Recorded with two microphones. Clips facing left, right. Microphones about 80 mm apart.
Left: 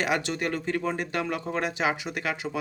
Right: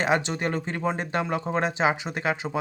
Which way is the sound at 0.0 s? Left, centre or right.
Right.